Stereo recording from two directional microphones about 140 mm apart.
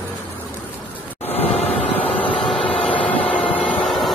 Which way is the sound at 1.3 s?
45° left (ahead or behind).